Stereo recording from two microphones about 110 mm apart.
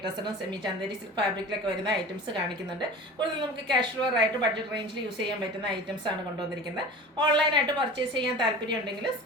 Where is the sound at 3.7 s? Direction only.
45° right (ahead or behind).